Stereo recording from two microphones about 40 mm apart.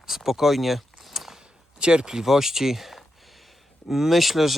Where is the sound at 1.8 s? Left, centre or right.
Right.